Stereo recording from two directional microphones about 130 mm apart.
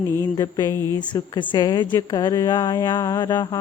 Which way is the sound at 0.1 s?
25° left (ahead or behind).